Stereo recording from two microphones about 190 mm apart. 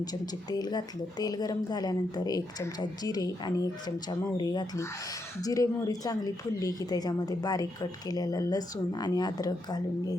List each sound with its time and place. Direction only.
0.0 s speech: 20° left (ahead or behind)